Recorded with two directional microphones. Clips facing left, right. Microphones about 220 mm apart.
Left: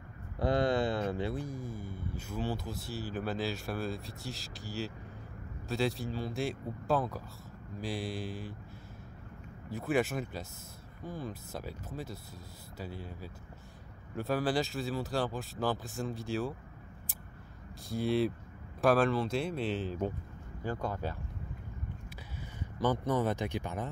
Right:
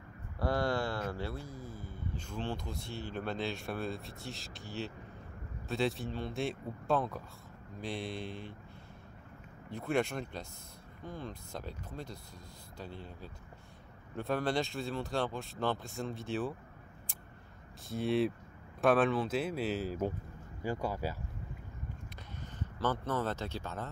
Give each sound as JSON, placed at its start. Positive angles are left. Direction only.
{"t": 0.4, "sound": "a sound", "side_deg": 20}
{"t": 1.1, "sound": "speech", "side_deg": 15}
{"t": 9.7, "sound": "speech", "side_deg": 5}
{"t": 17.8, "sound": "speech", "side_deg": 0}
{"t": 22.6, "sound": "speech", "side_deg": 15}